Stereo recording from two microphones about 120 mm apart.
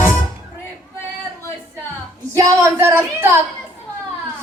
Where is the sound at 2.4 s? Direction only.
20° right (ahead or behind).